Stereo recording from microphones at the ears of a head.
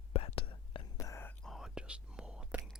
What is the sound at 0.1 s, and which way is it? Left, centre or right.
Whispering, left.